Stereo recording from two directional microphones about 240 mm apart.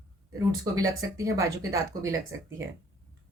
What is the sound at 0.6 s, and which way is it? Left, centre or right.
Speech, centre.